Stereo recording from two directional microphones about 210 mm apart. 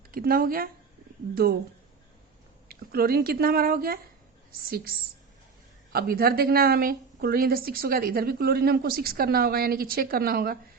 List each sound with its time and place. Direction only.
0.1 s a woman's voice: 45° right (ahead or behind)
2.6 s a woman's voice: 45° right (ahead or behind)
5.9 s a woman's voice: 45° right (ahead or behind)